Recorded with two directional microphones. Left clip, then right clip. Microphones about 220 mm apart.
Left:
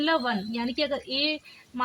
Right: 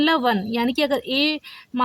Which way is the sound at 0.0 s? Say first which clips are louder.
Right 6 dB; 45° right (ahead or behind).